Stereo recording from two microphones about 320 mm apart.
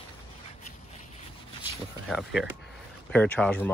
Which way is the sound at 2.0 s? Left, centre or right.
Centre.